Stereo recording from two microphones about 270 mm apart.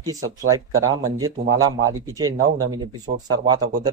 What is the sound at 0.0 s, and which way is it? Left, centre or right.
Speech, centre.